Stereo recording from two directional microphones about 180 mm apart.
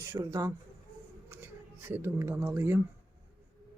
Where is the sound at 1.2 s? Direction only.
15° right (ahead or behind).